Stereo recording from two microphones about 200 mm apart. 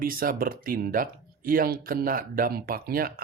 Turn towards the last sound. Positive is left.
turn(degrees=-45)  # may be behind; listen again after turning